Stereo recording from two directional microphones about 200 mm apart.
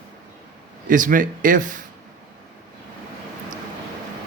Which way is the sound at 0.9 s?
40° right (ahead or behind).